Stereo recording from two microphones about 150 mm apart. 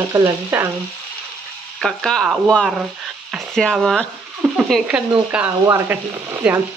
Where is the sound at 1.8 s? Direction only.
5° left (ahead or behind).